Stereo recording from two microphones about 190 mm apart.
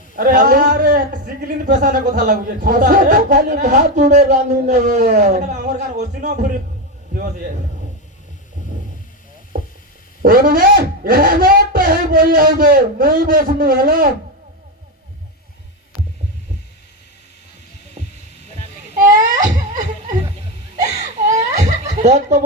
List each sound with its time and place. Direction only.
0.2 s speech: 50° right (ahead or behind)
10.2 s speech: 50° right (ahead or behind)
18.0 s heart sounds: 35° right (ahead or behind)
18.9 s babbling: 45° right (ahead or behind)
21.2 s laughter: 40° right (ahead or behind)
22.0 s speech: 40° right (ahead or behind)